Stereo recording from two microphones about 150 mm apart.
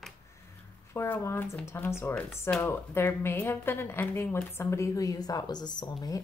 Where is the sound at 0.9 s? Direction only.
15° left (ahead or behind).